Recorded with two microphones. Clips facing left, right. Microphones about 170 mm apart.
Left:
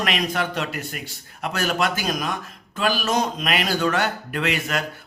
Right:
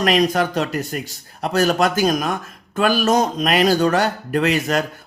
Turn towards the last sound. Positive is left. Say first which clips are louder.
# right 6 dB
turn(degrees=-40)  # may be behind; listen again after turning